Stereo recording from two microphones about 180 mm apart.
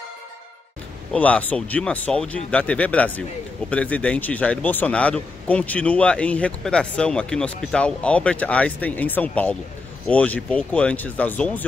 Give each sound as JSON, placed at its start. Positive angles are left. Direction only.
{"t": 1.1, "sound": "speech", "side_deg": 5}